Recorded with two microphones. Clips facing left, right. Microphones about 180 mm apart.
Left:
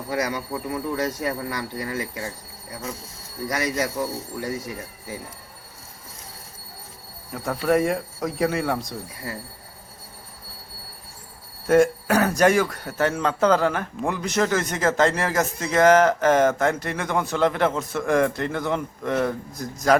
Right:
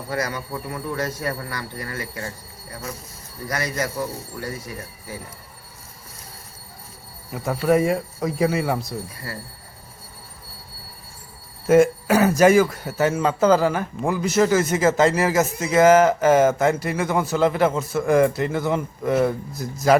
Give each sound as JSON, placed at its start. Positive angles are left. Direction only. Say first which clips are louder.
{"t": 0.1, "sound": "speech", "louder": "left 1 dB", "side_deg": 15}
{"t": 3.5, "sound": "speech", "louder": "left 1 dB", "side_deg": 20}
{"t": 7.3, "sound": "speech", "louder": "right 2 dB", "side_deg": -5}
{"t": 9.3, "sound": "speech", "louder": "left 5 dB", "side_deg": 20}
{"t": 11.6, "sound": "speech", "louder": "right 2 dB", "side_deg": -5}